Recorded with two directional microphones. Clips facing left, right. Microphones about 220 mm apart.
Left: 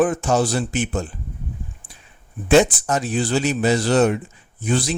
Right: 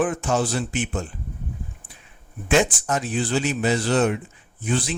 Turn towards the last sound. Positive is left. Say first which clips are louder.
# left 3 dB
turn(degrees=40)  # may be behind; listen again after turning